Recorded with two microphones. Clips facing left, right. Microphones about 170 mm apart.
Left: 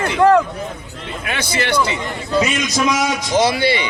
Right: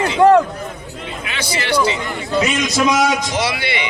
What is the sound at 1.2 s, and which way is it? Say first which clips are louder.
Speech: left 3 dB; 50° left (ahead or behind).